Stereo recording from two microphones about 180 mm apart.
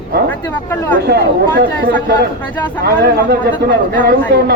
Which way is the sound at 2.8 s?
60° right (ahead or behind).